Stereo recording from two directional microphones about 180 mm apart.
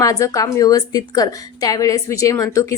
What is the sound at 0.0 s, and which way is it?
A woman's voice, 20° left (ahead or behind).